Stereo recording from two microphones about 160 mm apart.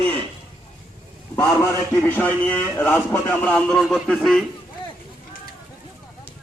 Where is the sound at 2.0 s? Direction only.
10° left (ahead or behind).